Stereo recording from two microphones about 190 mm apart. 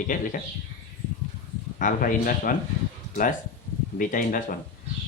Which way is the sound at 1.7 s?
45° left (ahead or behind).